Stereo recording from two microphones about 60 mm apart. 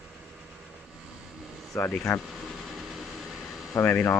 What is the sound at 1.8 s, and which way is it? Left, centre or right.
Speech, left.